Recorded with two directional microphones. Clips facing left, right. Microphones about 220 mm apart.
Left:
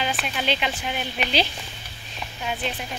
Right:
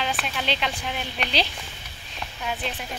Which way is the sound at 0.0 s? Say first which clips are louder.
Left 2 dB; 5° left (ahead or behind).